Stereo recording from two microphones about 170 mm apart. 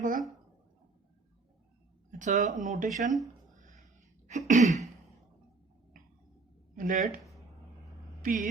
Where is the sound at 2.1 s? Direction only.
45° right (ahead or behind).